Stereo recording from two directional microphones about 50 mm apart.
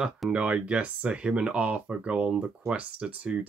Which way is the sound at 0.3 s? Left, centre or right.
Right.